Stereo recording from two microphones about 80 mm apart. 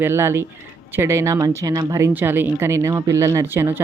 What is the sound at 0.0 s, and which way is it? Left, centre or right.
Speech, right.